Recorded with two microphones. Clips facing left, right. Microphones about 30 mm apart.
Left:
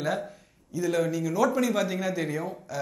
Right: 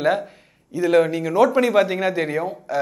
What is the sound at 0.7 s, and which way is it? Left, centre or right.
Speech, right.